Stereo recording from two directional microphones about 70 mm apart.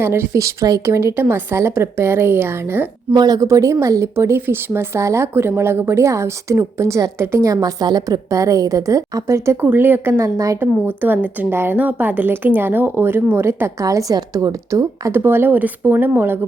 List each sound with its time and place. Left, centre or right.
0.0 s a woman's voice: right
3.2 s a woman's voice: right
7.4 s a woman's voice: right
9.6 s a woman's voice: right
13.8 s a woman's voice: right
15.1 s a woman's voice: right